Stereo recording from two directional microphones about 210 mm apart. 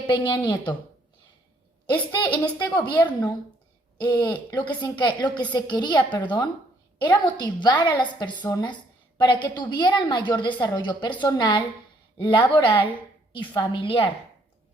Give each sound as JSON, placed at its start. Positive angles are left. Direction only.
{"t": 0.1, "sound": "a woman's voice", "side_deg": 20}
{"t": 2.2, "sound": "a woman's voice", "side_deg": 10}
{"t": 2.7, "sound": "a woman's voice", "side_deg": 20}